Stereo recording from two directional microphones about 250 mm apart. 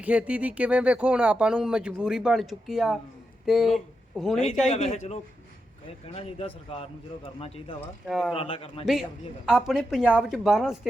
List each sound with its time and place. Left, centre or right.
0.0 s speech: centre
4.7 s a man's voice: left
8.0 s speech: centre
8.4 s a man's voice: left
9.5 s speech: centre